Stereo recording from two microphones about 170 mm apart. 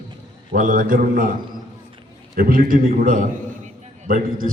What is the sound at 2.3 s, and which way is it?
A man's voice, 60° right (ahead or behind).